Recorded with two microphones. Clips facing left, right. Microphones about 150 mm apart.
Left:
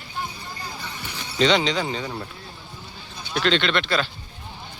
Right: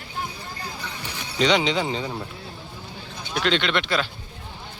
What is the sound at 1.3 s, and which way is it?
Speech, 10° right (ahead or behind).